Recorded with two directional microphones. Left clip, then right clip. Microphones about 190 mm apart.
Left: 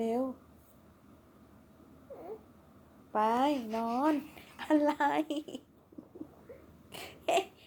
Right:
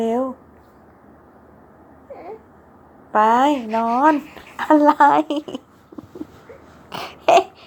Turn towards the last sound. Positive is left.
turn(degrees=-25)  # may be behind; listen again after turning